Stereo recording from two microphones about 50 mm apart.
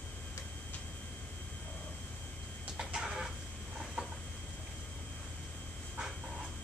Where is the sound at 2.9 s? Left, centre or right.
Centre.